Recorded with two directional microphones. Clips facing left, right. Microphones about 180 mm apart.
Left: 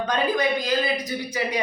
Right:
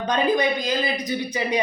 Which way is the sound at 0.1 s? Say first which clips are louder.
Right 3 dB; 20° right (ahead or behind).